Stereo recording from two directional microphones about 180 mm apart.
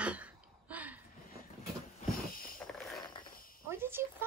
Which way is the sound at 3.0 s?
25° left (ahead or behind).